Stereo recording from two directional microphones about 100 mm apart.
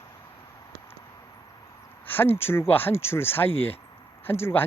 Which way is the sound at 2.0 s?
20° left (ahead or behind).